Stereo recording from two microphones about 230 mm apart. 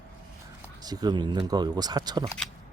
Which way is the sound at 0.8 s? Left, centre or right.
Centre.